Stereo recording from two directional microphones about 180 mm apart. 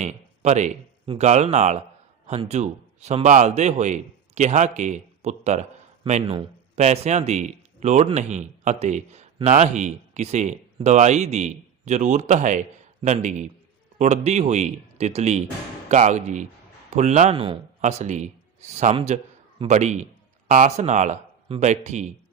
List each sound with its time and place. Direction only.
0.0 s speech: 40° right (ahead or behind)